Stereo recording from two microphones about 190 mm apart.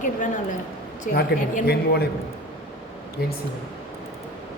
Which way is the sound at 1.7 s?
55° left (ahead or behind).